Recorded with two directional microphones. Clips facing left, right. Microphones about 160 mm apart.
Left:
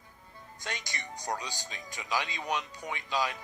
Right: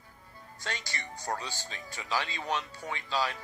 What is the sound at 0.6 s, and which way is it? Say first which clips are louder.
Speech: right 1 dB; 20° left (ahead or behind).